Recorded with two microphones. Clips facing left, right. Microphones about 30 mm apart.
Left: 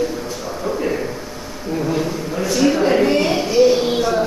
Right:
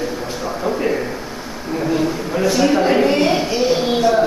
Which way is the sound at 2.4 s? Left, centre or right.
Centre.